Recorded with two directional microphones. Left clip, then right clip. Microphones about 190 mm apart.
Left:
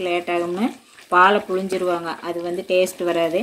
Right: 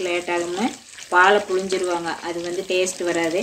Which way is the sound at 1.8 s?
50° left (ahead or behind).